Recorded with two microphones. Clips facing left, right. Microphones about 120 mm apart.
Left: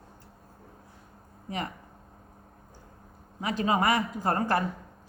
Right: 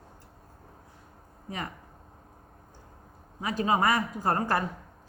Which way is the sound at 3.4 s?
40° right (ahead or behind).